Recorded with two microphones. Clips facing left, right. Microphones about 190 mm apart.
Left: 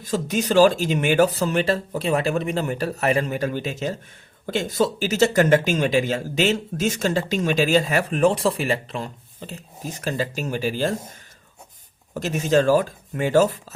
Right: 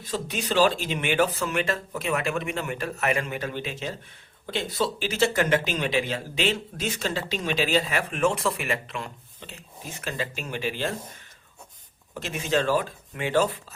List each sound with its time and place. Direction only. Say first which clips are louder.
0.0 s speech: left 7 dB; 45° left (ahead or behind)
12.1 s speech: left 6 dB; 40° left (ahead or behind)